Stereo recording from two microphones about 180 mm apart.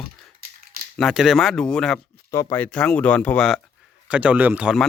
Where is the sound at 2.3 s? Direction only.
15° left (ahead or behind).